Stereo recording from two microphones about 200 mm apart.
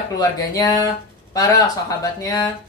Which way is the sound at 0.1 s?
20° left (ahead or behind).